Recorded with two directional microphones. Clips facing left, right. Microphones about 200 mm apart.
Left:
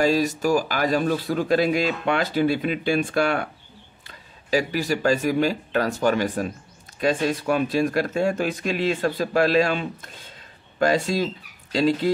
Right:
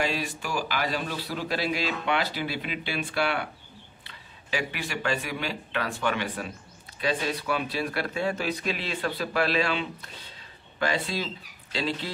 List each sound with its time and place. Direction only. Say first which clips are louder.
0.0 s speech: left 10 dB; 40° left (ahead or behind)